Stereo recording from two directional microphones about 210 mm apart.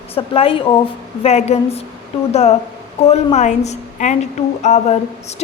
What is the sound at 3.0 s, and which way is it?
Speech, 30° left (ahead or behind).